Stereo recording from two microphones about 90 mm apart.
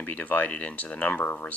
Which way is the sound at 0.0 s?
20° left (ahead or behind).